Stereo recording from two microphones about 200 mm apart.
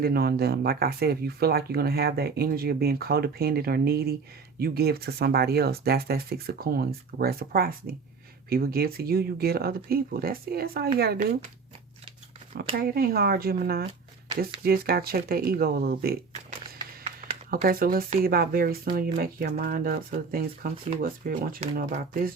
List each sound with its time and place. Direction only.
0.0 s speech: 50° right (ahead or behind)
12.5 s speech: 50° right (ahead or behind)